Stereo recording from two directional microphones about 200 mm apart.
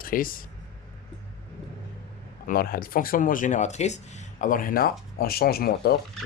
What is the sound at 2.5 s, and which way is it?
Speech, 45° left (ahead or behind).